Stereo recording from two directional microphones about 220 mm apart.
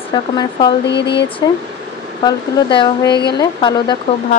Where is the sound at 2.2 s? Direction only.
20° left (ahead or behind).